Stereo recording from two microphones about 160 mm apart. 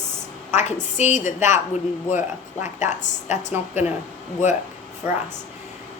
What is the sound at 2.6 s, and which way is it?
Speech, 50° left (ahead or behind).